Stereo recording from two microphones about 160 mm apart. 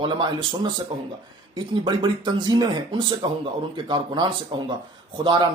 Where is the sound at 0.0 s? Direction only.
30° right (ahead or behind).